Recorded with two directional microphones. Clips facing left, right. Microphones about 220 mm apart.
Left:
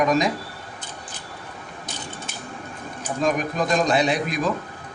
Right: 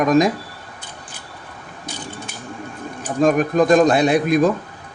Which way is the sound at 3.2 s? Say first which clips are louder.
Right 8 dB; 50° right (ahead or behind).